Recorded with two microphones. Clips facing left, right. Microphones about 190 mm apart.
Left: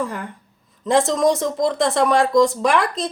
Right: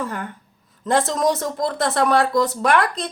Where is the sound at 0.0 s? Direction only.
Centre (ahead or behind).